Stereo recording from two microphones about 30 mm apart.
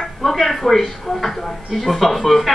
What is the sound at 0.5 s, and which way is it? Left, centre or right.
Speech, centre.